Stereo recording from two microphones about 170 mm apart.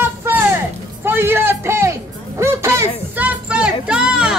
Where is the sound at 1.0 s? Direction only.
15° right (ahead or behind).